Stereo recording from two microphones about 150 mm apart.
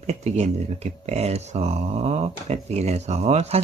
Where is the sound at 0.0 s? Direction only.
45° right (ahead or behind).